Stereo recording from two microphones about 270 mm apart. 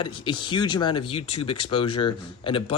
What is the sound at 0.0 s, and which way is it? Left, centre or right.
Speech, centre.